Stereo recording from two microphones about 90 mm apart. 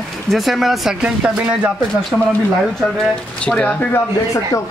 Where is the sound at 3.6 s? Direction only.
15° left (ahead or behind).